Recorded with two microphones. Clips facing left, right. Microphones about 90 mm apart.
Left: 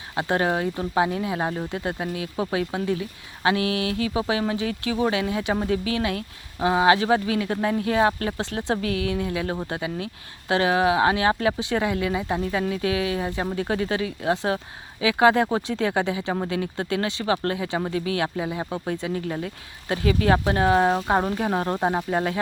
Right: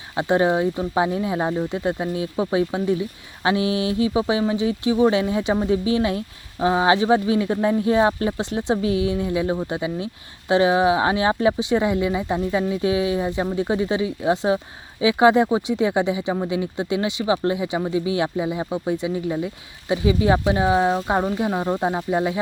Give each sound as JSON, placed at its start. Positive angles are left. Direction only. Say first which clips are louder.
{"t": 0.2, "sound": "speech", "louder": "right 4 dB", "side_deg": -20}
{"t": 21.8, "sound": "speech", "louder": "even", "side_deg": 10}
{"t": 22.1, "sound": "speech", "louder": "right 3 dB", "side_deg": -10}